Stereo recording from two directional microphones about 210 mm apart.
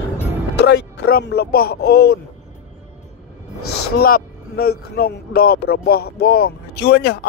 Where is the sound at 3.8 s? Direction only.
45° left (ahead or behind).